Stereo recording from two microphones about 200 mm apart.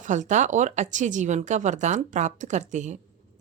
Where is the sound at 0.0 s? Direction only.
35° right (ahead or behind).